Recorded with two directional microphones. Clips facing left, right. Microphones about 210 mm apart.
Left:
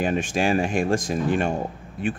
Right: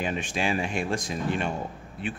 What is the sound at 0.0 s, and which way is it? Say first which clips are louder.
Speech: left 6 dB; 45° left (ahead or behind).